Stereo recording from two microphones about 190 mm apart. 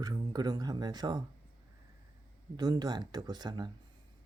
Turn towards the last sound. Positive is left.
turn(degrees=-20)  # may be behind; listen again after turning